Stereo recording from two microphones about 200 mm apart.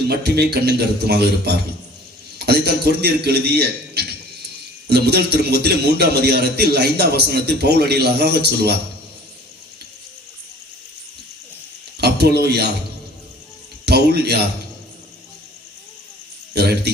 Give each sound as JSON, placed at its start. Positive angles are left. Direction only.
{"t": 0.0, "sound": "a man's voice", "side_deg": -55}
{"t": 11.9, "sound": "a sound", "side_deg": -55}
{"t": 13.8, "sound": "a man's voice", "side_deg": -55}
{"t": 16.6, "sound": "a man's voice", "side_deg": -55}